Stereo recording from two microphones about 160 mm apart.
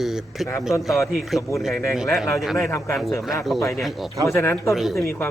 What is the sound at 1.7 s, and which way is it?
Speech, 20° left (ahead or behind).